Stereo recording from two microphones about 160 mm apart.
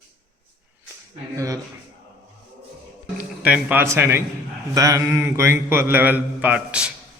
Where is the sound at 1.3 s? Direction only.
20° right (ahead or behind).